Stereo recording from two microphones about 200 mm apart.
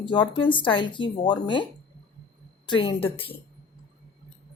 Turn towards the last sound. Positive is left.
turn(degrees=25)  # may be behind; listen again after turning